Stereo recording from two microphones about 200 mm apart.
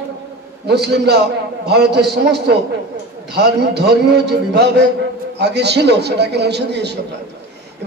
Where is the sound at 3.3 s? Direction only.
55° right (ahead or behind).